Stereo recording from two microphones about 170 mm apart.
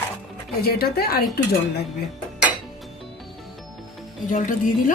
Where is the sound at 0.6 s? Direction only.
65° left (ahead or behind).